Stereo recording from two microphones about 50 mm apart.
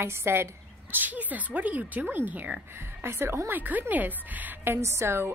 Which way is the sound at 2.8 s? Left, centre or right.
Right.